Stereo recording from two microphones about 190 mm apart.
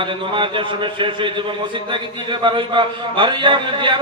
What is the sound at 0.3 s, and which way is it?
Speech, 25° right (ahead or behind).